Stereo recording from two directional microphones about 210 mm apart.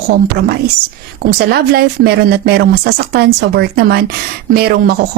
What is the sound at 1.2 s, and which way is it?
A woman's voice, 50° right (ahead or behind).